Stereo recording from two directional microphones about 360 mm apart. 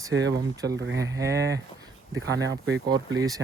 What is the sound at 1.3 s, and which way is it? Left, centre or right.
Speech, right.